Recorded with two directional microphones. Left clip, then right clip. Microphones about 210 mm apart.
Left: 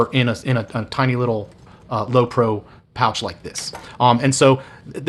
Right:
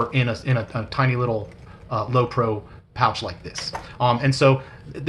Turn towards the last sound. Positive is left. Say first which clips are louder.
# left 5 dB
turn(degrees=50)  # may be behind; listen again after turning